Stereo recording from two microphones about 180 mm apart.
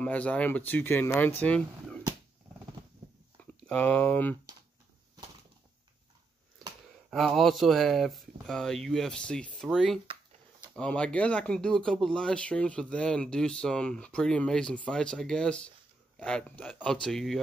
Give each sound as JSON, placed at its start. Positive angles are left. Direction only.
{"t": 0.0, "sound": "speech", "side_deg": 10}
{"t": 3.6, "sound": "speech", "side_deg": 5}
{"t": 7.1, "sound": "speech", "side_deg": 0}